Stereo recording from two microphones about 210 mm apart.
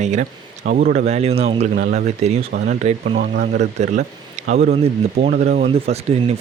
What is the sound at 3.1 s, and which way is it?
Speech, 50° right (ahead or behind).